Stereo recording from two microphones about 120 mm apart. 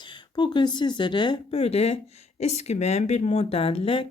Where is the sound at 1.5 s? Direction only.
60° left (ahead or behind).